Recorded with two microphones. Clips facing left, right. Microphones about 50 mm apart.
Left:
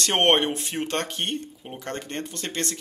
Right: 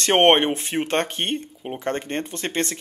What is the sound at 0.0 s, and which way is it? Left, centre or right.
Speech, right.